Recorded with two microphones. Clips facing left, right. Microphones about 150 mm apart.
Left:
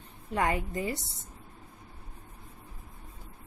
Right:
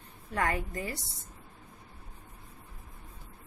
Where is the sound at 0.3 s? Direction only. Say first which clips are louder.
Left 2 dB; 20° left (ahead or behind).